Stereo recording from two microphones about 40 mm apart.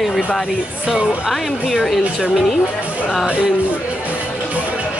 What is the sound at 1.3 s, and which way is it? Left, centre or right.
A woman's voice, centre.